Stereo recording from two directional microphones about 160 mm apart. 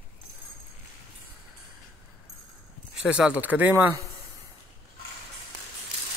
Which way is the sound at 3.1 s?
5° right (ahead or behind).